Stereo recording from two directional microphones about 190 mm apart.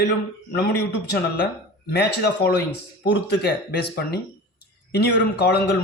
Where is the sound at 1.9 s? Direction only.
60° left (ahead or behind).